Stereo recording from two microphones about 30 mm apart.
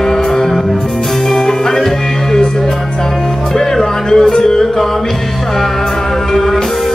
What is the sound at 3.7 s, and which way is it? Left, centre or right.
Music, centre.